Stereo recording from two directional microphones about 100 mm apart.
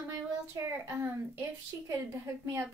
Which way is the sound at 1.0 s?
20° right (ahead or behind).